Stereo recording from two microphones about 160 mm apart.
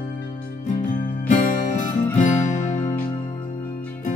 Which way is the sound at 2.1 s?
50° left (ahead or behind).